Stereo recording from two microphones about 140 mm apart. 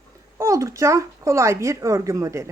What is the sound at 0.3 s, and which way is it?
Speech, 20° right (ahead or behind).